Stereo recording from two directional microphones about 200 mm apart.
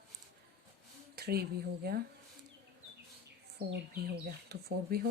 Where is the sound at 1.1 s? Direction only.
50° right (ahead or behind).